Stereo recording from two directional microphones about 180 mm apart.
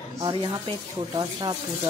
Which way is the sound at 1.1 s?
25° right (ahead or behind).